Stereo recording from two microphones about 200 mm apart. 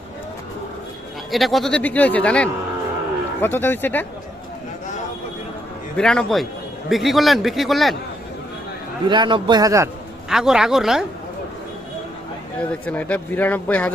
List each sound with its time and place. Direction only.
1.3 s a man's voice: centre (ahead or behind)
6.0 s speech: 5° left (ahead or behind)
9.0 s a man's voice: 25° right (ahead or behind)
10.2 s speech: centre (ahead or behind)
12.8 s a man's voice: 5° left (ahead or behind)